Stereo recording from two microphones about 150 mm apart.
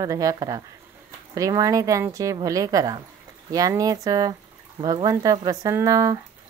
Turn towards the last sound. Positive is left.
turn(degrees=-20)  # may be behind; listen again after turning